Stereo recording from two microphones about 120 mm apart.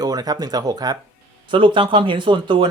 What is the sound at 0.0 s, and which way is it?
Speech, 35° right (ahead or behind).